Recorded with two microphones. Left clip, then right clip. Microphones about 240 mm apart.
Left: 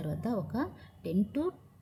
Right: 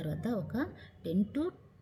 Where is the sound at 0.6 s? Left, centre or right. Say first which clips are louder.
Left 1 dB; left.